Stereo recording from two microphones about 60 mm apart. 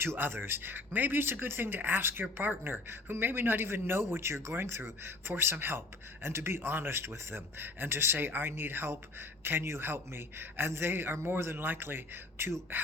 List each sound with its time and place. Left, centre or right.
0.0 s a woman's voice: right